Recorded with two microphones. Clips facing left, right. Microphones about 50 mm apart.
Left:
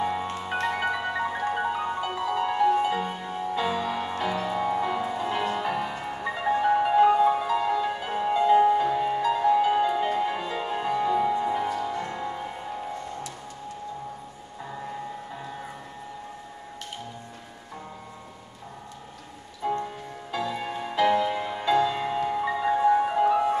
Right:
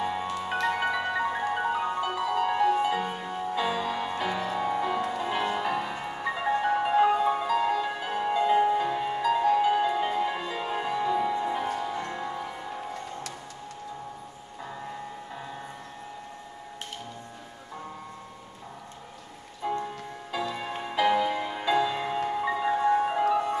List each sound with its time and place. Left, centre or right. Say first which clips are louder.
0.0 s marimba: left 2 dB; centre
0.7 s music: even; centre
11.7 s music: left 2 dB; centre
19.8 s music: left 1 dB; centre
23.2 s music: left 3 dB; centre